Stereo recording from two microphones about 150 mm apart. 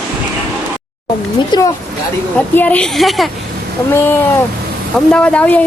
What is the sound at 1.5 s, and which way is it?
Speech, 30° left (ahead or behind).